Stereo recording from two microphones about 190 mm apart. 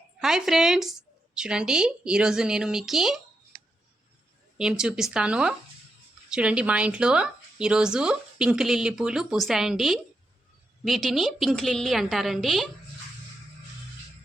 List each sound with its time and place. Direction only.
0.2 s speech: centre (ahead or behind)
4.5 s speech: 5° right (ahead or behind)